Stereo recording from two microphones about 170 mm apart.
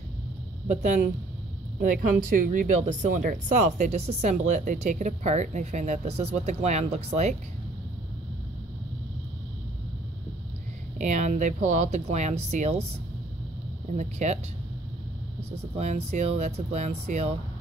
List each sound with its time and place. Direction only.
0.7 s speech: 45° right (ahead or behind)
11.0 s speech: 45° right (ahead or behind)
13.9 s speech: 45° right (ahead or behind)
15.5 s speech: 40° right (ahead or behind)